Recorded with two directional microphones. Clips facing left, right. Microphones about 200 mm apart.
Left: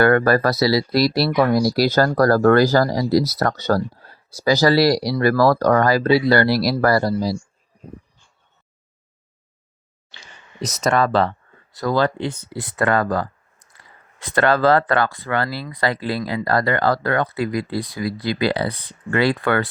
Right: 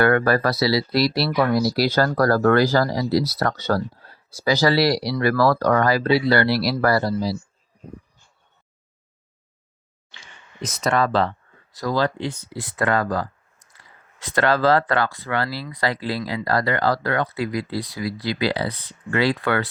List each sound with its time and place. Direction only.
0.0 s speech: 45° left (ahead or behind)
10.6 s speech: 40° left (ahead or behind)